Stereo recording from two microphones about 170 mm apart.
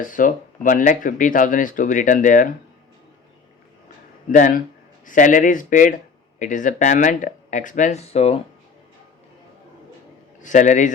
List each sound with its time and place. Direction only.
0.0 s speech: 50° left (ahead or behind)
4.3 s speech: 50° left (ahead or behind)
10.4 s speech: 45° left (ahead or behind)